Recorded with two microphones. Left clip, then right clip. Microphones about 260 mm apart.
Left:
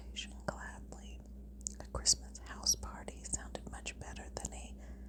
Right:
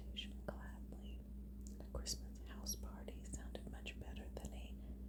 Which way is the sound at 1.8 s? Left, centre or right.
Left.